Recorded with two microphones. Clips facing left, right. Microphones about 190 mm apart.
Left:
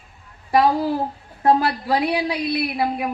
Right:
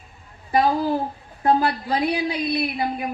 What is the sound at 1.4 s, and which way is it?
Speech, 80° left.